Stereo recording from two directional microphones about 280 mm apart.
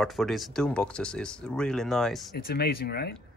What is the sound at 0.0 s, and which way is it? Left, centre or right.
Speech, centre.